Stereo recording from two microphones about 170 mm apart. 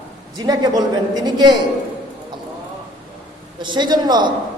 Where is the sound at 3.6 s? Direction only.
25° right (ahead or behind).